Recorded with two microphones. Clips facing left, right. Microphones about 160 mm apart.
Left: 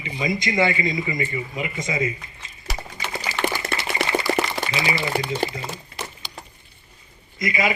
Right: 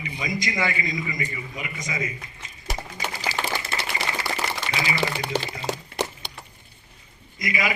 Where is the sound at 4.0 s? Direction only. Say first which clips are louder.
Left 9 dB; 60° left (ahead or behind).